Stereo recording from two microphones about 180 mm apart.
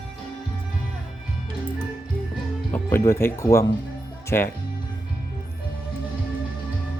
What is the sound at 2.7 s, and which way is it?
Speech, 15° left (ahead or behind).